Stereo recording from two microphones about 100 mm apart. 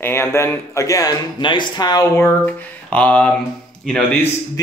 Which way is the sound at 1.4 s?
50° left (ahead or behind).